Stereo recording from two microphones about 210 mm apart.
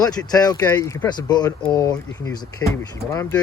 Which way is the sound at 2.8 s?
15° left (ahead or behind).